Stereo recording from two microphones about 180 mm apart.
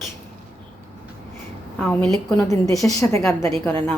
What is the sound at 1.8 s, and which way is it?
Speech, 10° left (ahead or behind).